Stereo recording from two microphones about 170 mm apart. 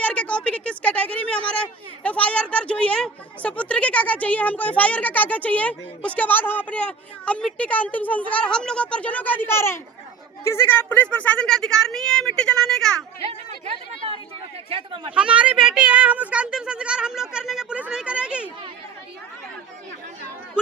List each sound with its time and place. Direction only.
0.0 s a woman's voice: 5° left (ahead or behind)
14.7 s speech: 30° right (ahead or behind)
15.1 s speech: 5° right (ahead or behind)